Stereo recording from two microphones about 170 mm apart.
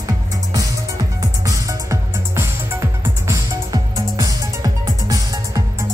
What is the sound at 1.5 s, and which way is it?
Music, 15° right (ahead or behind).